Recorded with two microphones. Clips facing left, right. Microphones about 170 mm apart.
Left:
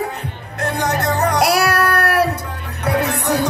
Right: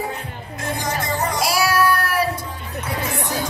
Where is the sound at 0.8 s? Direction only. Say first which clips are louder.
Left 6 dB; 65° left (ahead or behind).